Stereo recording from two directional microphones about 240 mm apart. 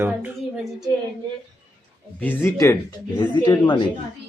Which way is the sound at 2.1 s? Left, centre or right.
Centre.